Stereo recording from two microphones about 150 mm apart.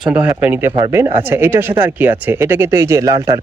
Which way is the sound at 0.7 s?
25° right (ahead or behind).